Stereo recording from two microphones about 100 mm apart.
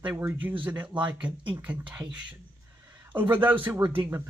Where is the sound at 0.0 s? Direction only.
20° right (ahead or behind).